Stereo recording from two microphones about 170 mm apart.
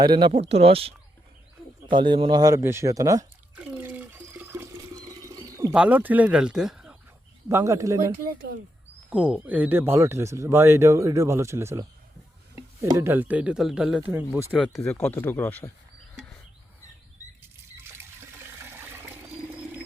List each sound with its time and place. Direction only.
0.0 s speech: 25° right (ahead or behind)
3.5 s water: 5° right (ahead or behind)
5.2 s a sound: 20° right (ahead or behind)
5.7 s speech: 5° right (ahead or behind)
7.4 s speech: 20° right (ahead or behind)
9.0 s speech: 5° right (ahead or behind)
14.6 s speech: 5° left (ahead or behind)
18.6 s toilet flush: 15° right (ahead or behind)